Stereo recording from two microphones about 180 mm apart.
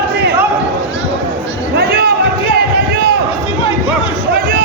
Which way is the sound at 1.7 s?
60° right (ahead or behind).